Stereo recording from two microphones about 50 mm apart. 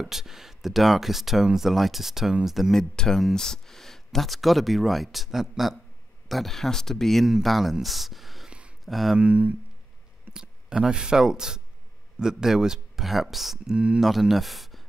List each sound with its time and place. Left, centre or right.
0.0 s speech: centre
2.7 s speech: centre
7.2 s speech: centre
8.5 s a sound: right
8.8 s speech: centre
9.2 s speech: right
10.3 s speech: centre
13.7 s speech: right
14.0 s speech: centre